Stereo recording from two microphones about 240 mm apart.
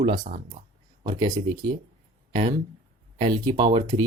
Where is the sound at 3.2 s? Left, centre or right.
Centre.